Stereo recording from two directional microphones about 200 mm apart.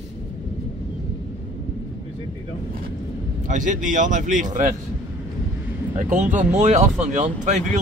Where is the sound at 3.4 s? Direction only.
40° right (ahead or behind).